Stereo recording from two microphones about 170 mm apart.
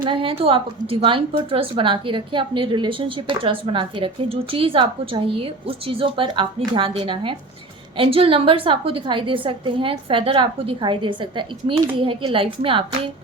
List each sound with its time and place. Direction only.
0.0 s a woman's voice: 30° right (ahead or behind)